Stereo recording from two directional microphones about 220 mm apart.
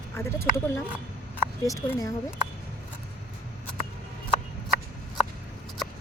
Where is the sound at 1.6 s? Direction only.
15° left (ahead or behind).